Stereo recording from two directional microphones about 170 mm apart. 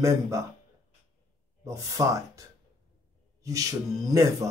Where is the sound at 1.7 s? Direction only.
20° right (ahead or behind).